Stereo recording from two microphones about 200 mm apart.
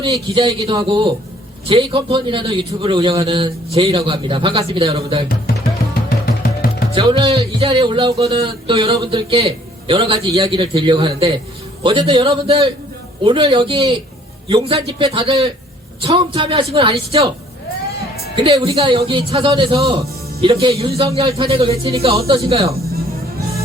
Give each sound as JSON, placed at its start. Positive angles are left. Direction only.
{"t": 0.0, "sound": "a man's voice", "side_deg": -25}
{"t": 5.9, "sound": "music", "side_deg": 50}
{"t": 6.9, "sound": "a man's voice", "side_deg": -25}
{"t": 18.5, "sound": "speech", "side_deg": -15}
{"t": 18.8, "sound": "a man's voice", "side_deg": -25}